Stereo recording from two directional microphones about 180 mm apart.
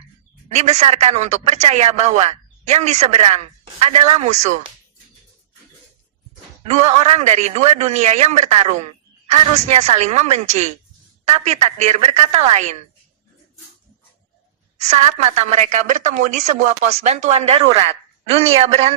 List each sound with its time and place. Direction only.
0.4 s speech: 40° right (ahead or behind)
6.7 s speech: 40° right (ahead or behind)
14.8 s speech: 40° right (ahead or behind)